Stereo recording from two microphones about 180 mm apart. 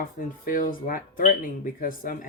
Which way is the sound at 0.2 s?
50° left (ahead or behind).